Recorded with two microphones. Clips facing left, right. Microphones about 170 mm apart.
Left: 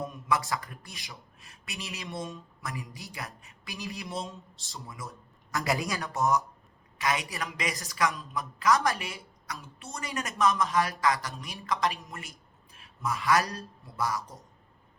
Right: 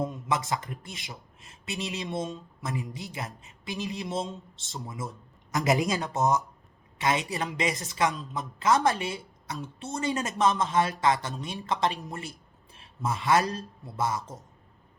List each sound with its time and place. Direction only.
0.0 s speech: 20° right (ahead or behind)